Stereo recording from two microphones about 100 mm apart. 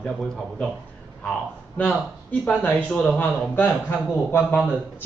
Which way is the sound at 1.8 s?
15° left (ahead or behind).